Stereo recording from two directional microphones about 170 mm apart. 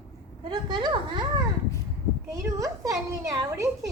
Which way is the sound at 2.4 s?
20° right (ahead or behind).